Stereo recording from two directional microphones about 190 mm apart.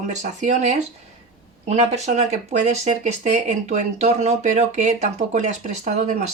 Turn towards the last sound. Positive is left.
turn(degrees=-40)  # may be behind; listen again after turning